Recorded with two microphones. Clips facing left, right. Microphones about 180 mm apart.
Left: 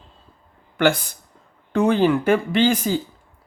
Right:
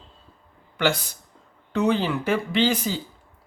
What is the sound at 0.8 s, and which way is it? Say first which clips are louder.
Speech: left 5 dB; 50° left (ahead or behind).